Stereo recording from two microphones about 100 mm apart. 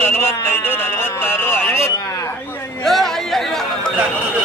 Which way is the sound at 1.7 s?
25° left (ahead or behind).